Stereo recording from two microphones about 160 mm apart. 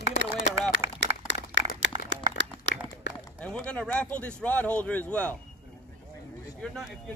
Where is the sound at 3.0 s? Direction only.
90° left.